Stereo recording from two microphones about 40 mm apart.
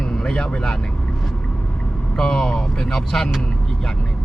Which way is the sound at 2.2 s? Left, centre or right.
Centre.